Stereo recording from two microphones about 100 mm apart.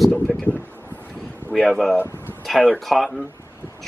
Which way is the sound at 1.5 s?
Centre (ahead or behind).